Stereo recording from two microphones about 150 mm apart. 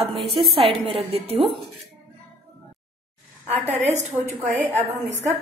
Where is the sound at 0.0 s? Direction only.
40° right (ahead or behind).